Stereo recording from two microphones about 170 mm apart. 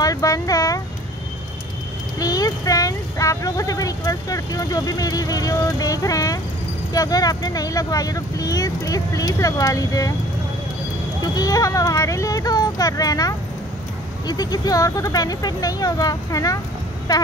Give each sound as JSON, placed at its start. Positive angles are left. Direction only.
{"t": 0.0, "sound": "a sound", "side_deg": 20}
{"t": 2.1, "sound": "speech", "side_deg": 20}
{"t": 11.3, "sound": "speech", "side_deg": 20}